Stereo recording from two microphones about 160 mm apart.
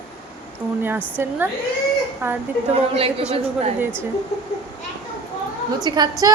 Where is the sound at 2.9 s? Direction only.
35° right (ahead or behind).